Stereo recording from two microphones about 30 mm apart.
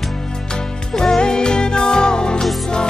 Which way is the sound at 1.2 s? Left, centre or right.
Left.